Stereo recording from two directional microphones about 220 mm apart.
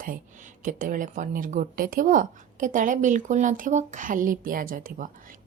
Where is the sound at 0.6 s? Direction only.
35° right (ahead or behind).